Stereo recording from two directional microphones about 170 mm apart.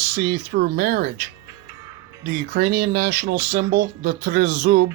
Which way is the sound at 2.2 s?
60° right (ahead or behind).